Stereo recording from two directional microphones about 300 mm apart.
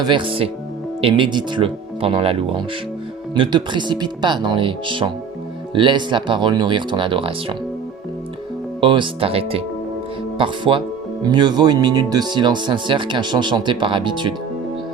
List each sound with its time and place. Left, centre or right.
0.0 s speech: centre
8.8 s speech: centre